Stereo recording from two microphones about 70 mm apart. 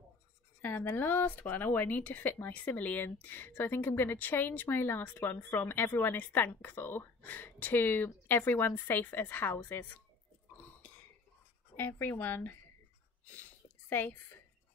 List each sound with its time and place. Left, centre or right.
0.6 s speech: left
11.7 s speech: left
13.4 s a sound: left